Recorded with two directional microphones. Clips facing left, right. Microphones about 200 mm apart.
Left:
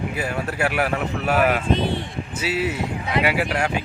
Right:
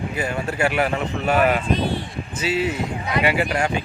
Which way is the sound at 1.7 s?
25° left (ahead or behind).